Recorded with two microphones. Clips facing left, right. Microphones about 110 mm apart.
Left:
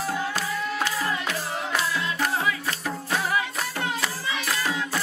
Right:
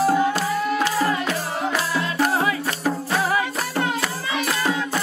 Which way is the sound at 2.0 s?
45° right (ahead or behind).